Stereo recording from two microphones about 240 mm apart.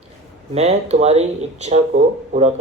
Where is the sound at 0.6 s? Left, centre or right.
Right.